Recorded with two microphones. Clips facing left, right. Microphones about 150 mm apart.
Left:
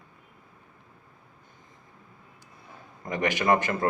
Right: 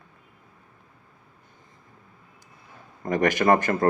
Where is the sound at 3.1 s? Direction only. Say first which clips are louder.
Right 4 dB; 45° right (ahead or behind).